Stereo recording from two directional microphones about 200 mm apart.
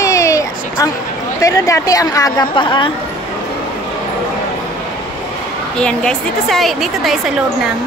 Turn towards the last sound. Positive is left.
turn(degrees=0)  # may be behind; listen again after turning